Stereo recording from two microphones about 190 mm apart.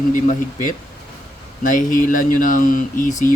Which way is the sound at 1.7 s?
45° left (ahead or behind).